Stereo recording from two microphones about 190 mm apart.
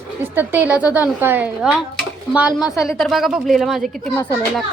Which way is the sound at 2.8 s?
Centre (ahead or behind).